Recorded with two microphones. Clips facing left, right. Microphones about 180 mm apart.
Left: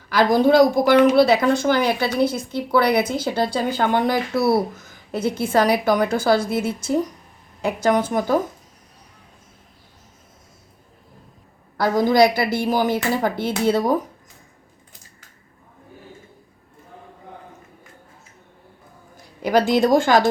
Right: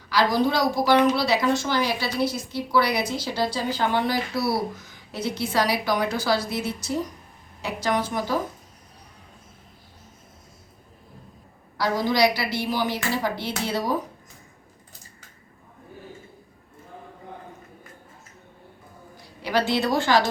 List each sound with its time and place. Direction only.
0.1 s speech: 50° left (ahead or behind)
11.8 s speech: 50° left (ahead or behind)
19.1 s a woman's voice: 45° left (ahead or behind)